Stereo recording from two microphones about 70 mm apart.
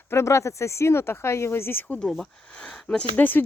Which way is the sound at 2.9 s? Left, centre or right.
Left.